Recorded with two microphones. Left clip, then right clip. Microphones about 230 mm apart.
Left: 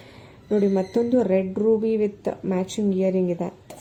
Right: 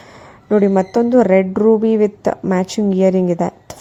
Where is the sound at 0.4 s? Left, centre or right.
Right.